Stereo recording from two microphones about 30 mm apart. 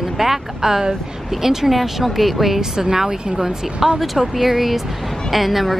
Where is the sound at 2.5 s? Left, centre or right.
Right.